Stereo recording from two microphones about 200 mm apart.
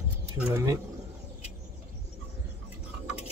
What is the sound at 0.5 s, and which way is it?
Speech, 15° right (ahead or behind).